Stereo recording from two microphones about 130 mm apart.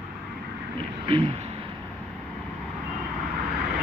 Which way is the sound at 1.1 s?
40° right (ahead or behind).